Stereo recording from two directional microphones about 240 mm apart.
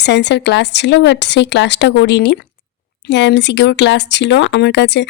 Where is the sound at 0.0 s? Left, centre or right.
Left.